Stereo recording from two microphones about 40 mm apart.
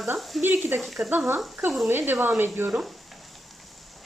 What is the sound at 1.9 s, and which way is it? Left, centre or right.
Speech, right.